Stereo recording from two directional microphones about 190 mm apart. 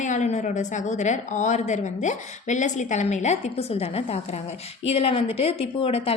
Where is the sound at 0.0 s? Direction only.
40° left (ahead or behind).